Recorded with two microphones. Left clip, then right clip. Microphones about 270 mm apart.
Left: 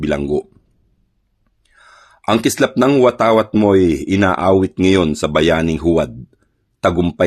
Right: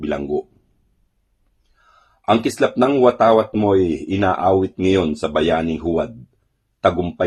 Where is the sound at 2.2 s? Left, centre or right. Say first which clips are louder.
Left 2 dB; left.